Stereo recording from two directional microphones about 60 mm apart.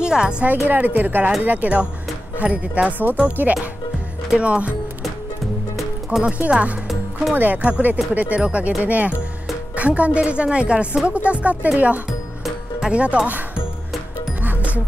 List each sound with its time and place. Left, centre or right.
0.0 s speech: centre
0.7 s speech: right
6.0 s speech: centre
6.5 s speech: right
12.1 s music: centre
12.9 s speech: centre
14.4 s music: right